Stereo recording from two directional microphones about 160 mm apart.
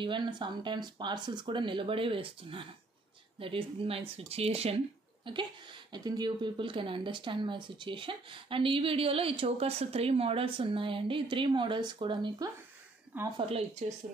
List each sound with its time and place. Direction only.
0.0 s a woman's voice: 30° right (ahead or behind)